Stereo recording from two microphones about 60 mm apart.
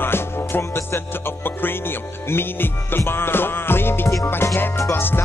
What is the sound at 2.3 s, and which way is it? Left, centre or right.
Music, left.